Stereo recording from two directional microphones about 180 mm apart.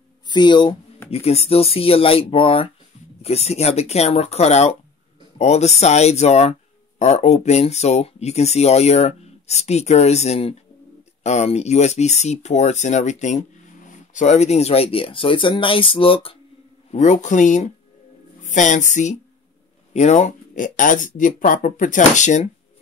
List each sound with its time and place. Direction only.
0.3 s speech: 25° left (ahead or behind)
16.9 s speech: 40° left (ahead or behind)